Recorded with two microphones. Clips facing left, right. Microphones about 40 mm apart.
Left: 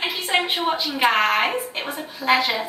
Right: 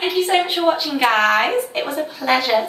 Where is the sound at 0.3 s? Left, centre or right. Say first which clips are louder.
Right 2 dB; centre.